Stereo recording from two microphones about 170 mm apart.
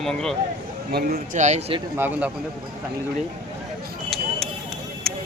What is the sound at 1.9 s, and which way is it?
Speech, 10° right (ahead or behind).